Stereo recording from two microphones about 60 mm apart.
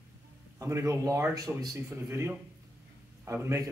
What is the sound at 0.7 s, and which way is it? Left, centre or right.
Speech, right.